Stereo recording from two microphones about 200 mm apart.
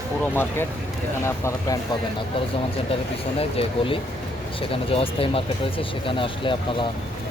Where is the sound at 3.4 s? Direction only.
25° left (ahead or behind).